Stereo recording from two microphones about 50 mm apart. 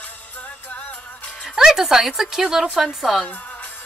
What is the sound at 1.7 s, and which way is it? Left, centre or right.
Speech, centre.